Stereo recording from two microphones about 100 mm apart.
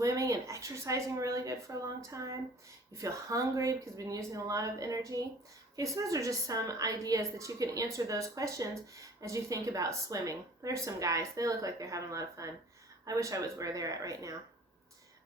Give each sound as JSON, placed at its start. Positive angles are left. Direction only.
{"t": 0.0, "sound": "a woman's voice", "side_deg": -35}